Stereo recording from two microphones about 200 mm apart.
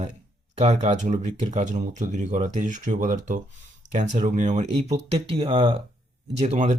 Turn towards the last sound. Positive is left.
turn(degrees=-35)  # may be behind; listen again after turning